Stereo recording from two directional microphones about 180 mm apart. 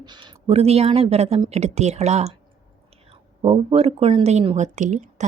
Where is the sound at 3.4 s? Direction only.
35° right (ahead or behind).